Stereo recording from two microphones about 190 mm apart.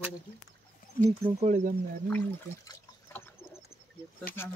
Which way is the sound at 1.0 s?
45° left (ahead or behind).